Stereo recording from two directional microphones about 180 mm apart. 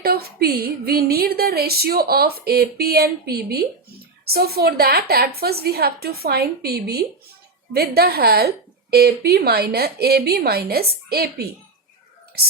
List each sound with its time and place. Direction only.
0.0 s a woman's voice: 60° right (ahead or behind)